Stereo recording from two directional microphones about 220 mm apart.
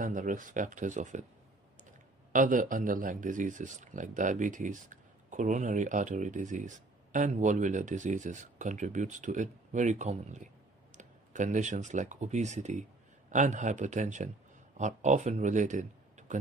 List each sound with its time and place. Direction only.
0.0 s speech: 35° right (ahead or behind)
2.3 s speech: 35° right (ahead or behind)